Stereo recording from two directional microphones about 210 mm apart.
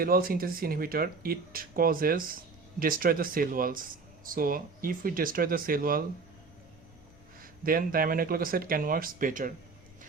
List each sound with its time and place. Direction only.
0.0 s speech: 45° right (ahead or behind)
7.4 s speech: 40° right (ahead or behind)